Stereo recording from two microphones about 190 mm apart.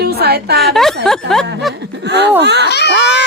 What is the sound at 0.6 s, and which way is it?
Speech, centre (ahead or behind).